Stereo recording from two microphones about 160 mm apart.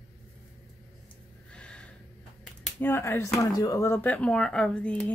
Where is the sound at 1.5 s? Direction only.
5° left (ahead or behind).